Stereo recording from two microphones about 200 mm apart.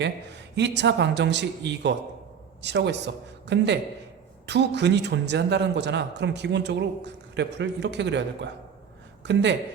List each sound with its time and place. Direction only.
0.5 s speech: 60° right (ahead or behind)